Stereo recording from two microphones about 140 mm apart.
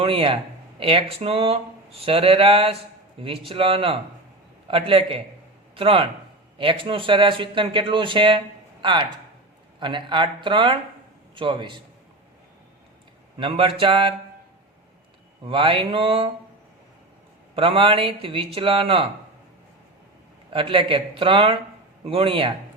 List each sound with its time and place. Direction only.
0.0 s speech: 40° right (ahead or behind)
13.4 s speech: 40° right (ahead or behind)
15.4 s speech: 40° right (ahead or behind)
17.5 s speech: 40° right (ahead or behind)
20.5 s speech: 40° right (ahead or behind)